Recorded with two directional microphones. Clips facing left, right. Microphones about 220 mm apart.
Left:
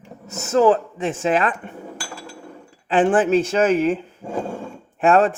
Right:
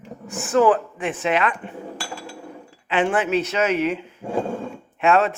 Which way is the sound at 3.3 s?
45° left (ahead or behind).